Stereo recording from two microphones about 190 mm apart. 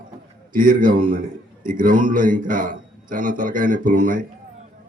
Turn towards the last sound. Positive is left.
turn(degrees=-45)  # may be behind; listen again after turning